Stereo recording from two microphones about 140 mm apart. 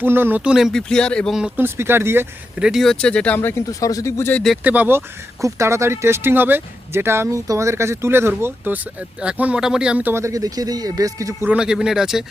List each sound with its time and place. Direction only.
0.0 s speech: 15° right (ahead or behind); by 1.4 s 5° left (ahead or behind)
1.4 s speech: 5° right (ahead or behind)
1.6 s speech: 15° right (ahead or behind)
2.6 s speech: centre (ahead or behind); by 4.4 s 15° left (ahead or behind)
4.6 s speech: 10° right (ahead or behind)
11.4 s speech: 5° right (ahead or behind)